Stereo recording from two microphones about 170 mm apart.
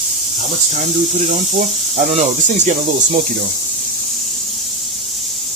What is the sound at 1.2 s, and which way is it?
Speech, 45° right (ahead or behind).